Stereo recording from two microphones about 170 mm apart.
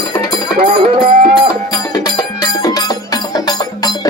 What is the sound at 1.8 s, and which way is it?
Music, 20° left (ahead or behind).